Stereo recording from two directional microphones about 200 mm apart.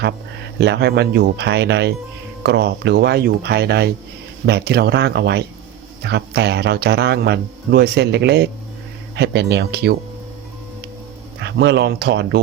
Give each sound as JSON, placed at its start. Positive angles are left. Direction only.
{"t": 0.6, "sound": "speech", "side_deg": -55}
{"t": 11.3, "sound": "speech", "side_deg": -60}